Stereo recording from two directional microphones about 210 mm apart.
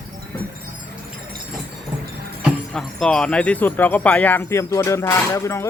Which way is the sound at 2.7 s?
5° left (ahead or behind).